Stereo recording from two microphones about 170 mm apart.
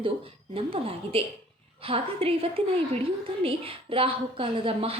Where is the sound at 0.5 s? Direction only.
35° right (ahead or behind).